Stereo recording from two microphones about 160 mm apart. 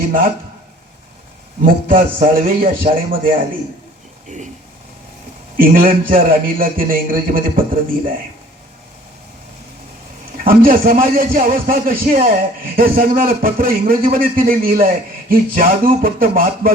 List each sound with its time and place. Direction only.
1.6 s a man's voice: 60° right (ahead or behind)
5.5 s a man's voice: 60° right (ahead or behind)
10.3 s a man's voice: 65° right (ahead or behind)